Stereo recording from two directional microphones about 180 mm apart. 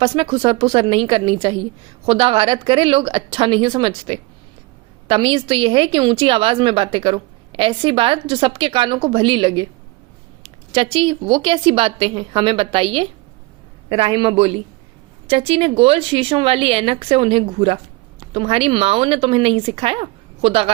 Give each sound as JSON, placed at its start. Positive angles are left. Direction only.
{"t": 0.0, "sound": "a woman's voice", "side_deg": -30}